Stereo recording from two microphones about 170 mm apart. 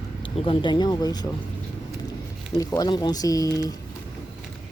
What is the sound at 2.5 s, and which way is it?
Speech, 20° left (ahead or behind).